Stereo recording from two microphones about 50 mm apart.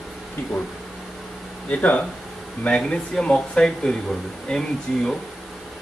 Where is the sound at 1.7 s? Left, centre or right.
Left.